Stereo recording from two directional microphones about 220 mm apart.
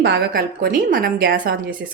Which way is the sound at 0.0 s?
45° right (ahead or behind).